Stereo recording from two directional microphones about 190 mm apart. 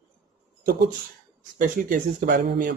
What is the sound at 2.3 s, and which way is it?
Speech, 50° right (ahead or behind).